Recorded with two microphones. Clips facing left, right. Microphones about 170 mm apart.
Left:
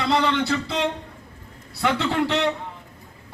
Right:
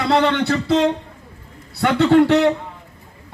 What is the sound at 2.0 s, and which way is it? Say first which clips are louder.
Speech: right 15 dB; 60° right (ahead or behind).